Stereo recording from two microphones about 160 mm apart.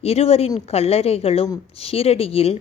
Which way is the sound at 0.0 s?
40° left (ahead or behind).